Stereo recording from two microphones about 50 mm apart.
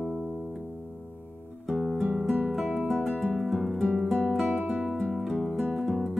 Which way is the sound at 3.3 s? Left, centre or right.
Centre.